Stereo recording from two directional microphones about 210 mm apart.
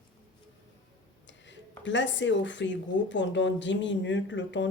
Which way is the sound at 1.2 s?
60° left (ahead or behind).